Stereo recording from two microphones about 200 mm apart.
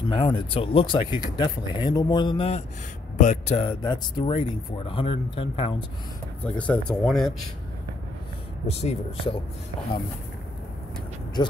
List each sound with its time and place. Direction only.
0.1 s speech: 25° left (ahead or behind)
3.8 s speech: 20° left (ahead or behind)
6.4 s speech: 5° left (ahead or behind)
8.6 s speech: 30° left (ahead or behind)